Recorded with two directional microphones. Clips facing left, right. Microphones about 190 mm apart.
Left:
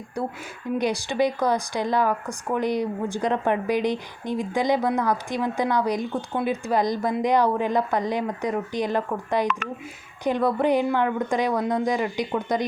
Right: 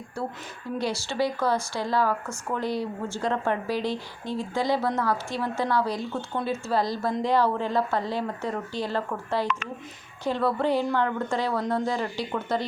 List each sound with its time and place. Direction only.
0.2 s speech: 15° left (ahead or behind)